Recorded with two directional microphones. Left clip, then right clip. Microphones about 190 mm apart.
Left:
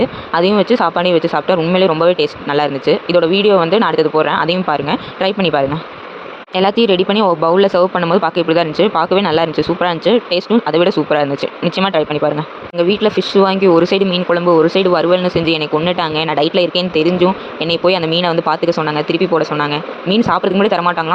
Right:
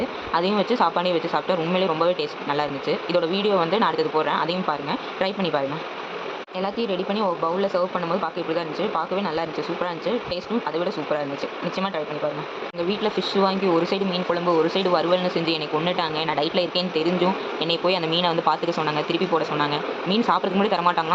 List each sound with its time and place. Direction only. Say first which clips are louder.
0.0 s speech: left 9 dB; 40° left (ahead or behind)
12.7 s speech: left 12 dB; 35° left (ahead or behind)